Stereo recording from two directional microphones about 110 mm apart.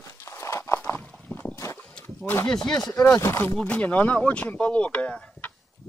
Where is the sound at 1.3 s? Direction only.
25° left (ahead or behind).